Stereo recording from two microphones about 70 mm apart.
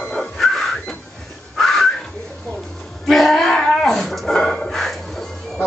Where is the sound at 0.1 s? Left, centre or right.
Centre.